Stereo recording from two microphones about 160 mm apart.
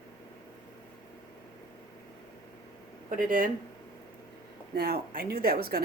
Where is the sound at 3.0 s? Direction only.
60° right (ahead or behind).